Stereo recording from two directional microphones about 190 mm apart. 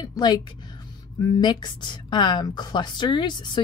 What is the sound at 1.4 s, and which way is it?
A woman's voice, 25° left (ahead or behind).